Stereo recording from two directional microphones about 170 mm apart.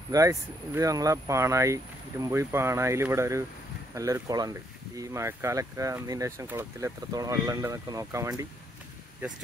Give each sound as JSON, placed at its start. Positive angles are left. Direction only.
{"t": 0.1, "sound": "speech", "side_deg": -20}